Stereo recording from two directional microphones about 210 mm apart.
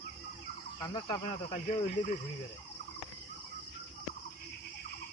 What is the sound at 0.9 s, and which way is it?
Speech, 35° left (ahead or behind).